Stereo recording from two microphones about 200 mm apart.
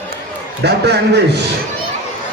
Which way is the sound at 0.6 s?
55° right (ahead or behind).